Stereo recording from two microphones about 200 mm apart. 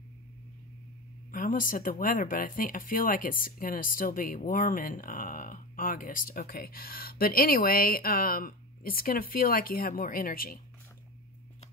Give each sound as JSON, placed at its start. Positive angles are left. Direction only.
{"t": 1.3, "sound": "speech", "side_deg": 40}